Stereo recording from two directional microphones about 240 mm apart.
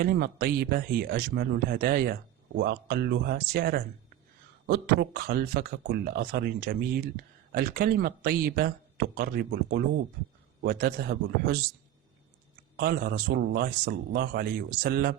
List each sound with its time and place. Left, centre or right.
0.0 s speech: right
12.7 s speech: right